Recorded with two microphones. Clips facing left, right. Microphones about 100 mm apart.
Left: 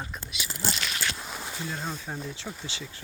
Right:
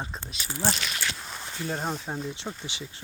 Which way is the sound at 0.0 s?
30° right (ahead or behind).